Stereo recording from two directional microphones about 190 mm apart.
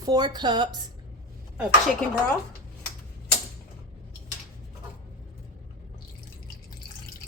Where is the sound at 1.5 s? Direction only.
Centre (ahead or behind).